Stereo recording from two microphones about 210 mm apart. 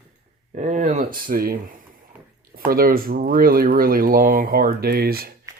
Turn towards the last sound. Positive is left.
turn(degrees=-45)  # may be behind; listen again after turning